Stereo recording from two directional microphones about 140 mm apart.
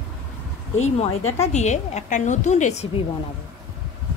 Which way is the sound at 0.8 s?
50° left (ahead or behind).